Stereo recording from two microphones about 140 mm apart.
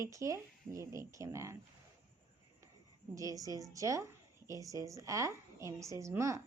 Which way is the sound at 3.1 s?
25° right (ahead or behind).